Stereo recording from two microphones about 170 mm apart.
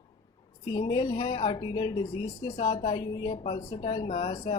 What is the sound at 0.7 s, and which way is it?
Speech, 25° left (ahead or behind).